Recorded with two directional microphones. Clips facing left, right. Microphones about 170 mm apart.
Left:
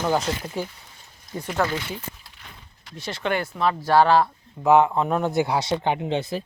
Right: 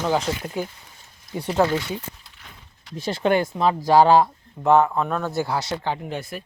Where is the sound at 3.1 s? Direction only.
25° right (ahead or behind).